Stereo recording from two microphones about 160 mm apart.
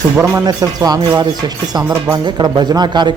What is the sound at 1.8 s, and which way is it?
Speech, 10° right (ahead or behind).